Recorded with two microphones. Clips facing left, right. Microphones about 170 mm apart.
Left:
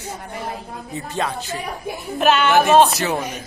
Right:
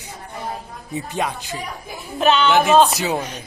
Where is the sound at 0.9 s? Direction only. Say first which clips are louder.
Right 1 dB; 15° right (ahead or behind).